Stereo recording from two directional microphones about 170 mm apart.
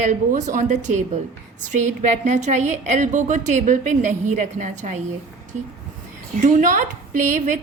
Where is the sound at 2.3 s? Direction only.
45° right (ahead or behind).